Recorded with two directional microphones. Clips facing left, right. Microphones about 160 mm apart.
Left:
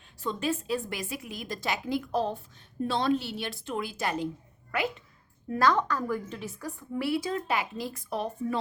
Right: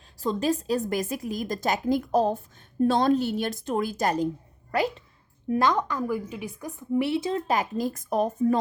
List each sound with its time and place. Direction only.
0.2 s a woman's voice: 35° right (ahead or behind)
5.5 s a woman's voice: 20° right (ahead or behind)
7.4 s a woman's voice: 40° right (ahead or behind)